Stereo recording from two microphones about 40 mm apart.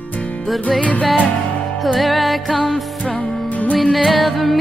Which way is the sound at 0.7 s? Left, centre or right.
Left.